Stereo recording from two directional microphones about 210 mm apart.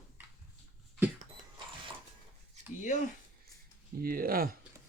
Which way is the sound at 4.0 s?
45° right (ahead or behind).